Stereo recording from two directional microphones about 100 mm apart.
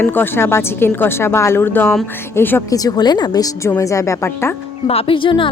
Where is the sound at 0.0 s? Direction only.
20° left (ahead or behind).